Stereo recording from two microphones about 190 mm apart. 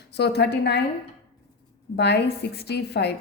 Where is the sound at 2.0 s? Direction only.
60° left (ahead or behind).